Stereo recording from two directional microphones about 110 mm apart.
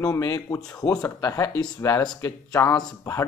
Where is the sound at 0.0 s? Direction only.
30° left (ahead or behind).